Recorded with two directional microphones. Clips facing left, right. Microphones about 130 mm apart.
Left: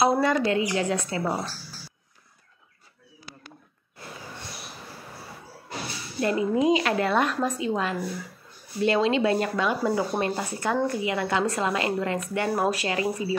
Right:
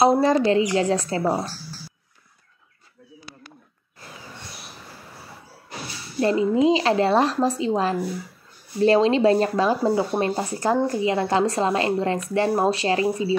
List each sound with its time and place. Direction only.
0.0 s speech: 30° right (ahead or behind)
6.2 s a woman's voice: 25° right (ahead or behind)